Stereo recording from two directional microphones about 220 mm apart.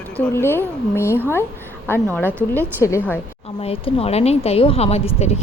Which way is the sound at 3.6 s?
25° left (ahead or behind).